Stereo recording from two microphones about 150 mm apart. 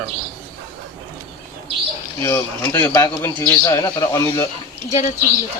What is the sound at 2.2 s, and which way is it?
A man's voice, 20° left (ahead or behind).